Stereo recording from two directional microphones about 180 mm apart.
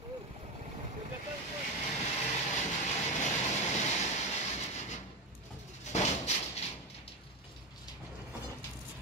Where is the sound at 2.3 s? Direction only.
40° left (ahead or behind).